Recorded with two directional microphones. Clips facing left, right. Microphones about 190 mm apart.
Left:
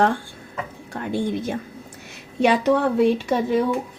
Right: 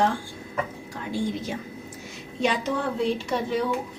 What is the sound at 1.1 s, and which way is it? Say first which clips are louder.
A woman's voice: left 4 dB; 55° left (ahead or behind).